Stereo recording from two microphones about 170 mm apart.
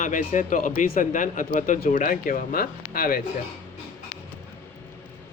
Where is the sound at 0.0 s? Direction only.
50° left (ahead or behind).